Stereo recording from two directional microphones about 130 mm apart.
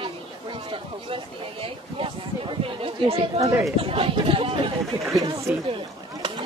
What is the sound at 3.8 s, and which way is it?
Speech, 45° right (ahead or behind).